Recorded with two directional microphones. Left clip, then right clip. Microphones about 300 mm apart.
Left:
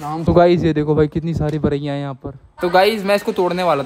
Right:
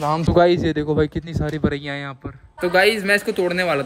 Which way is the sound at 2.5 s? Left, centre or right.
Centre.